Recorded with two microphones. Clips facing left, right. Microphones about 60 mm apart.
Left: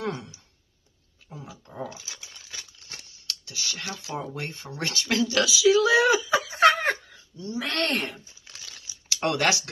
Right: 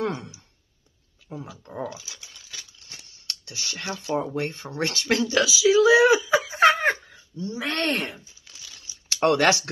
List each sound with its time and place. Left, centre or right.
0.0 s a sound: right
1.3 s speech: right
3.1 s a sound: right
4.4 s speech: right
5.3 s speech: centre
6.6 s laughter: centre
7.3 s speech: right
9.1 s speech: right